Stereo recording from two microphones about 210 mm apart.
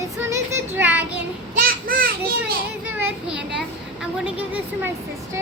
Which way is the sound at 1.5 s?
40° right (ahead or behind).